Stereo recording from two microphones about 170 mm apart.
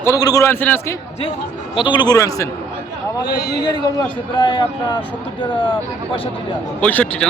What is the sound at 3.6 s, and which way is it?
A man's voice, 25° left (ahead or behind).